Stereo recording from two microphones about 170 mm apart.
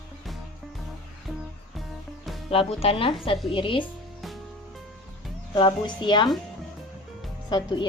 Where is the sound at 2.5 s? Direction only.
35° left (ahead or behind).